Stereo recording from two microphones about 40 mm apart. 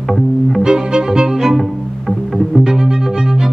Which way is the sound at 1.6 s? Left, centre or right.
Centre.